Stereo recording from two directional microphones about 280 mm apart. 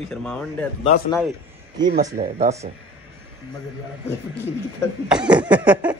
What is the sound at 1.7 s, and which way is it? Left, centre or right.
Speech, right.